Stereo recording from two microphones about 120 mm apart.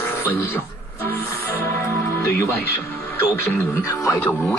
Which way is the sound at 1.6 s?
20° left (ahead or behind).